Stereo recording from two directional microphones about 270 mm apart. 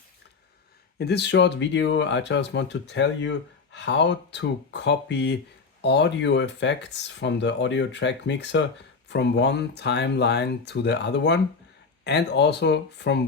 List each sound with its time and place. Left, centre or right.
0.9 s speech: left